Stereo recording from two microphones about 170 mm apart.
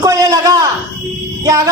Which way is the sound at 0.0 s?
20° right (ahead or behind).